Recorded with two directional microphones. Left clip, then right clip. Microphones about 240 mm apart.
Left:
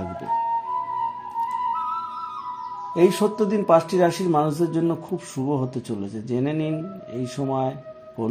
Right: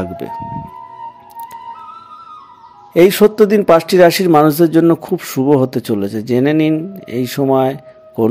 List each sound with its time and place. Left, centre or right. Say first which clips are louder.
2.9 s a man's voice: right 10 dB; right